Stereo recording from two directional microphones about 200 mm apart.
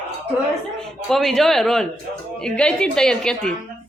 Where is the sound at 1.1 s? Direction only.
Centre (ahead or behind).